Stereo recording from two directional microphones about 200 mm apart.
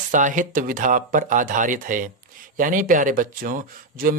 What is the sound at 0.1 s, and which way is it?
Speech, 40° right (ahead or behind).